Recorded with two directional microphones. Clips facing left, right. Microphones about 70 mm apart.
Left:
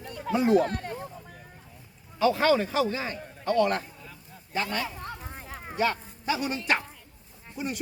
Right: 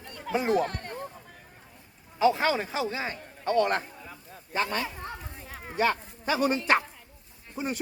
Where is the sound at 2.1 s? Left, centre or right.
Right.